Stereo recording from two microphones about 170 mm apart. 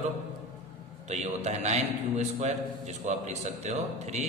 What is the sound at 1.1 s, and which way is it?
A man's voice, 40° right (ahead or behind).